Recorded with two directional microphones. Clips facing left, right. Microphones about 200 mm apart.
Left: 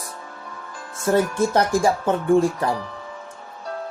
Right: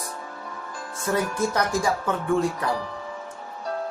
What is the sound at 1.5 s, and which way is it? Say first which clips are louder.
Speech: left 5 dB; 30° left (ahead or behind).